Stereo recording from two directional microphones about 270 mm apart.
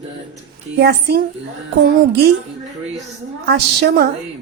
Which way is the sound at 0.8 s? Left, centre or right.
Right.